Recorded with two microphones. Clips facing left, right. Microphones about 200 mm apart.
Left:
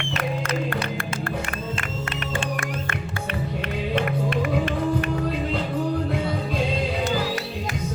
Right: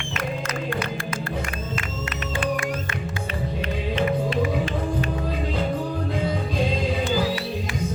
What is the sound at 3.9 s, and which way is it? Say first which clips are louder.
Music: right 2 dB; 60° left (ahead or behind).